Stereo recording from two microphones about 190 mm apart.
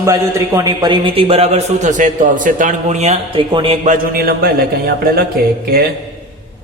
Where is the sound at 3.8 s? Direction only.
45° right (ahead or behind).